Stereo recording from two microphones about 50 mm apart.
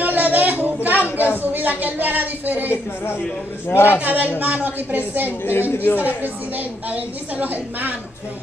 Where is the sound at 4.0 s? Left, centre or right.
Right.